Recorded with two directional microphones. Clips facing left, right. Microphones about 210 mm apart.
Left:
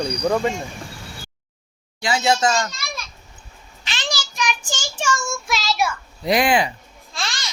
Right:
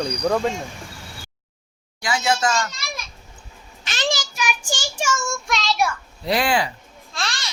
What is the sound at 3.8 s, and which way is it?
Child singing, 45° right (ahead or behind).